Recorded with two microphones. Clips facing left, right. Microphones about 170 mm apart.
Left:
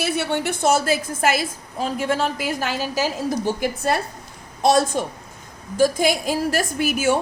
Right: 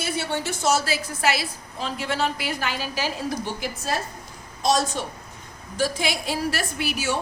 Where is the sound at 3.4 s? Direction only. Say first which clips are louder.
Left 8 dB; 55° left (ahead or behind).